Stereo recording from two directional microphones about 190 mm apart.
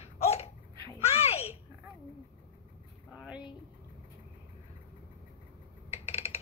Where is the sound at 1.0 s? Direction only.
30° left (ahead or behind).